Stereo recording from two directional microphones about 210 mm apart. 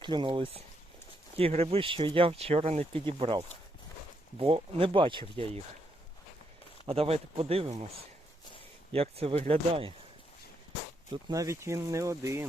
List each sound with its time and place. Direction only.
0.0 s speech: 20° right (ahead or behind)
6.8 s speech: 30° right (ahead or behind)
8.9 s speech: 30° right (ahead or behind)
11.3 s speech: 15° right (ahead or behind)